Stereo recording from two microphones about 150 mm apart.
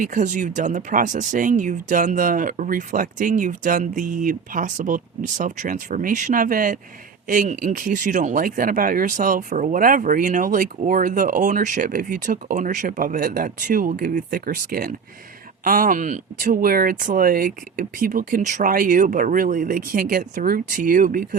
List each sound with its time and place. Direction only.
0.0 s speech: 60° right (ahead or behind)